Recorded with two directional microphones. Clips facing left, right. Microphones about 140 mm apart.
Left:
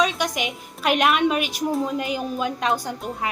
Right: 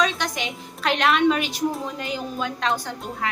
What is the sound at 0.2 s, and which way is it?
A woman's voice, 15° left (ahead or behind).